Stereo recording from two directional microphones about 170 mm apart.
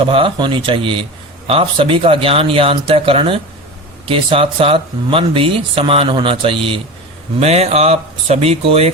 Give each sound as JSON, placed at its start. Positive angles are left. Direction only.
{"t": 0.0, "sound": "speech", "side_deg": -30}